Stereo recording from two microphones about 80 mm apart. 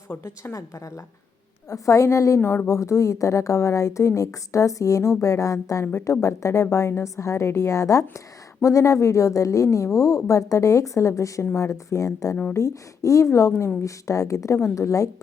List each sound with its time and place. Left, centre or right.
0.1 s a woman's voice: left
0.5 s a woman's voice: left
5.8 s a woman's voice: left